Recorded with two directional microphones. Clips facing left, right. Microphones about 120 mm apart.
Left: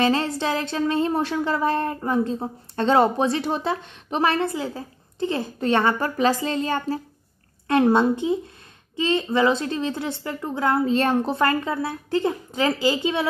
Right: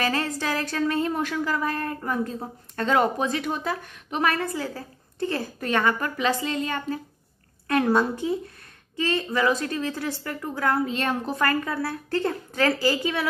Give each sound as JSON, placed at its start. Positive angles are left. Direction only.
{"t": 0.0, "sound": "a woman's voice", "side_deg": 25}
{"t": 10.9, "sound": "a woman's voice", "side_deg": 35}